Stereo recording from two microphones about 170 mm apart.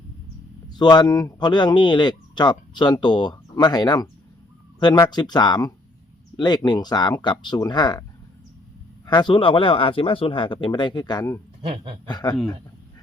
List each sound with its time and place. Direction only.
0.7 s speech: 25° left (ahead or behind)
9.0 s speech: 25° left (ahead or behind)
11.6 s speech: 35° right (ahead or behind)
12.0 s speech: 25° left (ahead or behind)